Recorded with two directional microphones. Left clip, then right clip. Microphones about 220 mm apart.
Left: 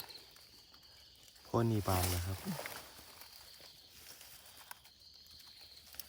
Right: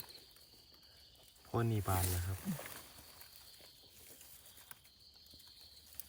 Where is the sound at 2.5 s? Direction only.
40° left (ahead or behind).